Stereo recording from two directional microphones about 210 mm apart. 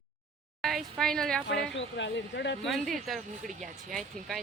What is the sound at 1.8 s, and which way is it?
Speech, 60° left (ahead or behind).